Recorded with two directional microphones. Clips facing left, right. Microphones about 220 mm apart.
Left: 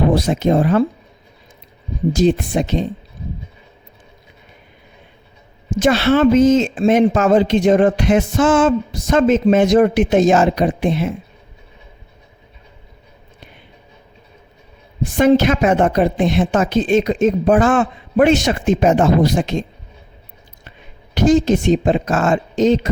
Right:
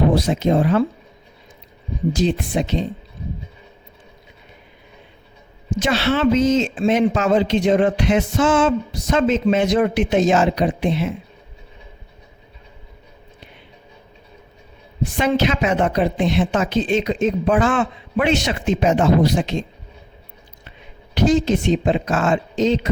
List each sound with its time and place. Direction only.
0.1 s speech: 50° left (ahead or behind)
2.1 s speech: 50° left (ahead or behind)
5.7 s speech: 50° left (ahead or behind)
15.2 s speech: 50° left (ahead or behind)
21.2 s speech: 45° left (ahead or behind)